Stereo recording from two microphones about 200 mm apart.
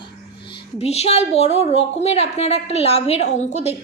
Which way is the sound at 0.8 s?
30° left (ahead or behind).